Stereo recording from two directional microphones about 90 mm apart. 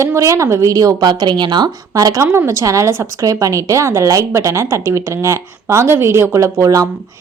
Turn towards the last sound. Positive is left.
turn(degrees=-40)  # may be behind; listen again after turning